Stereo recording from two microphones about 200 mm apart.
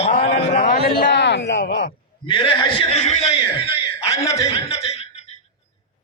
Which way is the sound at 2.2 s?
25° left (ahead or behind).